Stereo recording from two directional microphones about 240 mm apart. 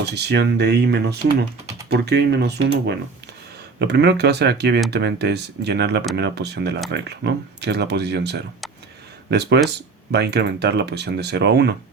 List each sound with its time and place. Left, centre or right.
0.1 s speech: right